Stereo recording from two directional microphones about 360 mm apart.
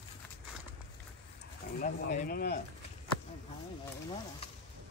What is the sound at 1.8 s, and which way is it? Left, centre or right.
Speech, left.